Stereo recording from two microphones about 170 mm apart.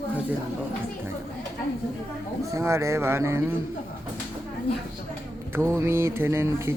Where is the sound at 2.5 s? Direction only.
15° right (ahead or behind).